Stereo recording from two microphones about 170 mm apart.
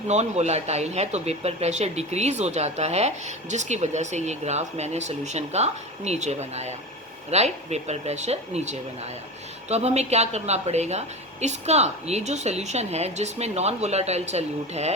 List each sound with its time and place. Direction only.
0.1 s speech: 40° right (ahead or behind)